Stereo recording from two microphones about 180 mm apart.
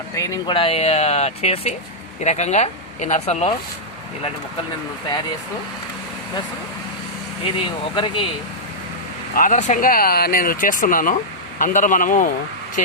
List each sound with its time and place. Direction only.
0.2 s speech: 15° left (ahead or behind)
0.5 s speech: 30° left (ahead or behind)
7.4 s speech: 30° left (ahead or behind)
9.3 s speech: 45° left (ahead or behind)